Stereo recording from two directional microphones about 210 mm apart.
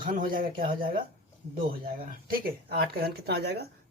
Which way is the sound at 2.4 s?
45° right (ahead or behind).